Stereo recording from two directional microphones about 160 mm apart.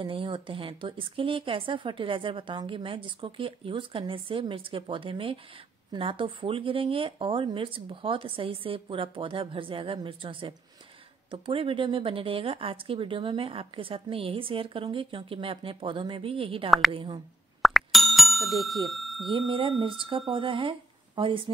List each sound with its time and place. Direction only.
0.0 s speech: 30° right (ahead or behind)
17.6 s bicycle bell: centre (ahead or behind)
19.2 s speech: 30° right (ahead or behind)